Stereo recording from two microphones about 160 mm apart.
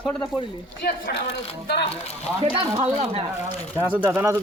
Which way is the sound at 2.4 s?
35° right (ahead or behind).